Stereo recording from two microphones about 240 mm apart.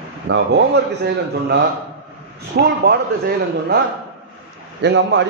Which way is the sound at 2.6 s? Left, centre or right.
Right.